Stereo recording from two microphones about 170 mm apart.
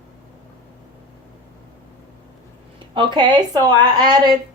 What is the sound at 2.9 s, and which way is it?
Speech, 25° right (ahead or behind).